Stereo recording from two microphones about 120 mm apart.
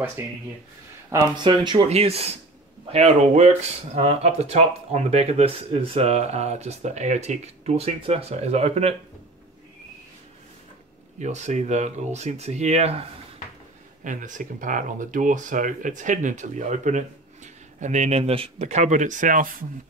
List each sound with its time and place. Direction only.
0.2 s speech: 25° right (ahead or behind)
1.1 s speech: 40° right (ahead or behind)
1.9 s speech: 55° right (ahead or behind)
11.1 s speech: 75° right (ahead or behind)
14.0 s speech: 90° right